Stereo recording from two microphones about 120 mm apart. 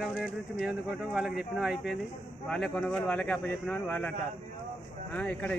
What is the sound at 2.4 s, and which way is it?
Speech, 5° left (ahead or behind).